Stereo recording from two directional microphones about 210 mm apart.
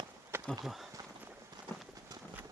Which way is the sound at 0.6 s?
Centre (ahead or behind).